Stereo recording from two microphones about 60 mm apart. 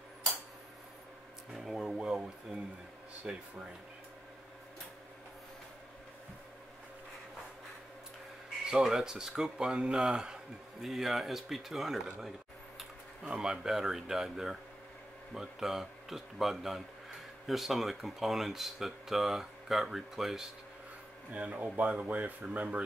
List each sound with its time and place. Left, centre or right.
1.5 s a sound: centre
3.3 s speech: centre
8.6 s speech: centre
21.3 s speech: right